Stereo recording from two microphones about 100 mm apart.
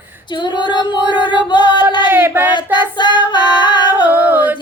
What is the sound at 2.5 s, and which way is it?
Female singing, 50° left (ahead or behind).